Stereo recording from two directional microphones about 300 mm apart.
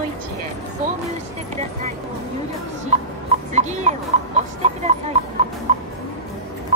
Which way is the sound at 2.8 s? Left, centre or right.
Right.